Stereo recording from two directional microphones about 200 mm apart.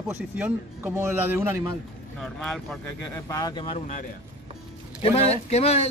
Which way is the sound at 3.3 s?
20° left (ahead or behind).